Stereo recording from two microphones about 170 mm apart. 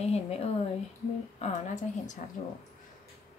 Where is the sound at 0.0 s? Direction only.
35° left (ahead or behind).